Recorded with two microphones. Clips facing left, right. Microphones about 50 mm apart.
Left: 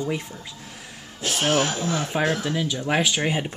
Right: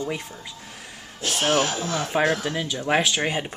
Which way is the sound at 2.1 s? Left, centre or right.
Centre.